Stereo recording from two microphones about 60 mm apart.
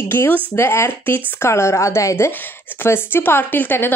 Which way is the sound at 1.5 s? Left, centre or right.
Left.